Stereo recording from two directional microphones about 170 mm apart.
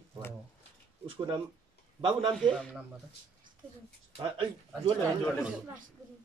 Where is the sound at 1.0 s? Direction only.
30° right (ahead or behind).